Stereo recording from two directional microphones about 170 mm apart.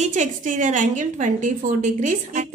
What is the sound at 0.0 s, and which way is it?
A woman's voice, 45° right (ahead or behind).